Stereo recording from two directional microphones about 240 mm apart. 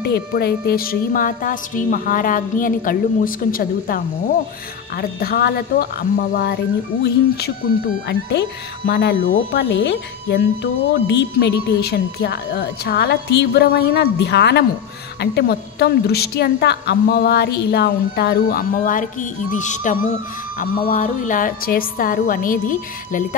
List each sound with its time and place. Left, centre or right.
0.0 s speech: left